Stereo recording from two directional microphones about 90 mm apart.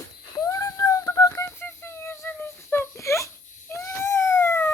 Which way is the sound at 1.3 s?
30° left (ahead or behind).